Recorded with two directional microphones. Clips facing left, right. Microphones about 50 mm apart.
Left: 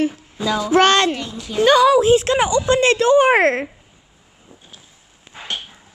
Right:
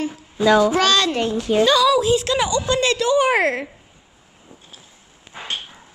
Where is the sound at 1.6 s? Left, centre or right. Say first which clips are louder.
Left 4 dB; left.